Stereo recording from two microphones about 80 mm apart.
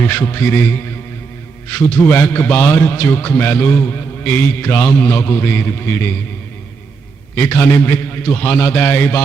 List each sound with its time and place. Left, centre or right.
0.0 s a man's voice: left
7.3 s a man's voice: left